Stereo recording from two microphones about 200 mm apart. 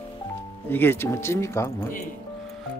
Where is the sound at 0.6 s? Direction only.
10° left (ahead or behind).